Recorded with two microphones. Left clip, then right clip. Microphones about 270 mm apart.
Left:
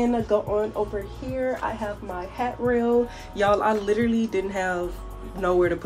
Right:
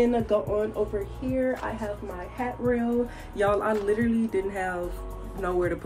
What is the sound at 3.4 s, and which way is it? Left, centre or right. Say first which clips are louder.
Speech: left 3 dB; left.